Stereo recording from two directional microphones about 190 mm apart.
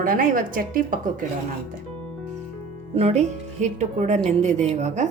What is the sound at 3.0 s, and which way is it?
A woman's voice, 35° right (ahead or behind).